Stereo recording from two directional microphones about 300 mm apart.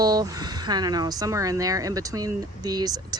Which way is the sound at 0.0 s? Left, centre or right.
Centre.